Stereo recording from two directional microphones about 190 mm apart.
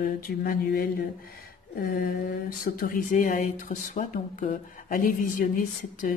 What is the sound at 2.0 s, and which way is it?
Speech, 50° left (ahead or behind).